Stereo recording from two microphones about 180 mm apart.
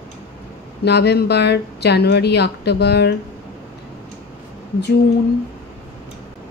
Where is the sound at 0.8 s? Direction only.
65° left (ahead or behind).